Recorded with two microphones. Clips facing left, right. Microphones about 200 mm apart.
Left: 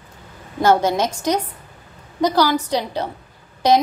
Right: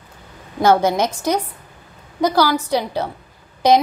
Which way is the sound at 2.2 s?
10° right (ahead or behind).